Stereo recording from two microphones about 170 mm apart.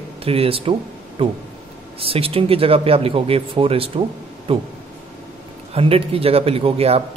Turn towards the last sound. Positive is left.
turn(degrees=-35)  # may be behind; listen again after turning